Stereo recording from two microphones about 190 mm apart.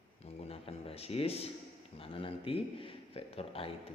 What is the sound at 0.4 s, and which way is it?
A man's voice, 30° left (ahead or behind).